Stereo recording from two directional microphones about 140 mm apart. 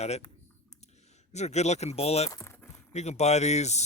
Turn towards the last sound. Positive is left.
turn(degrees=55)  # may be behind; listen again after turning